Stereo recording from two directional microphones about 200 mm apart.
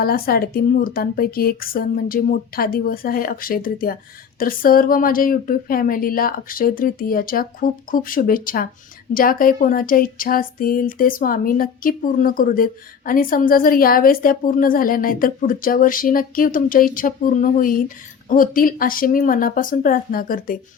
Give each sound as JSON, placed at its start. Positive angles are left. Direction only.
{"t": 0.0, "sound": "speech", "side_deg": 50}